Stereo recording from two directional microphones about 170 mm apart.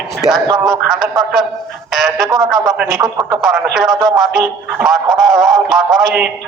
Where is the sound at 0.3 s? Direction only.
20° right (ahead or behind).